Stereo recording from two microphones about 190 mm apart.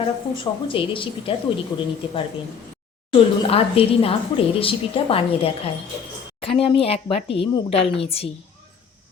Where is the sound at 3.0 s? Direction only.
30° left (ahead or behind).